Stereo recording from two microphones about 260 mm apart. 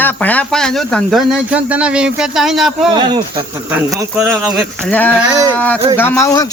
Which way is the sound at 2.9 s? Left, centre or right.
Centre.